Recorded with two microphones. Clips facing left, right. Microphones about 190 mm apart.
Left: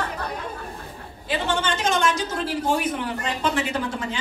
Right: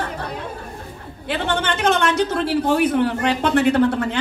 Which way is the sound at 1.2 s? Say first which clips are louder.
Right 2 dB; 60° right (ahead or behind).